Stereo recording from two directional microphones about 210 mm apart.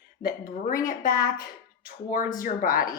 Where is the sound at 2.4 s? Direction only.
40° left (ahead or behind).